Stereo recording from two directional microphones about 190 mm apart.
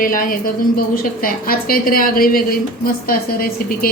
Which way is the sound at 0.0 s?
45° left (ahead or behind).